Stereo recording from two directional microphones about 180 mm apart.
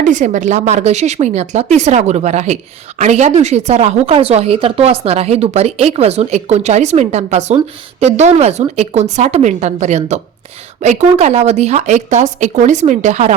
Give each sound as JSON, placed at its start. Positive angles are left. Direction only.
{"t": 0.0, "sound": "speech", "side_deg": -45}